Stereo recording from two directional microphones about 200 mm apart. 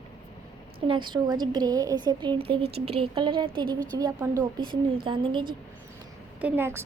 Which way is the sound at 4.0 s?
15° right (ahead or behind).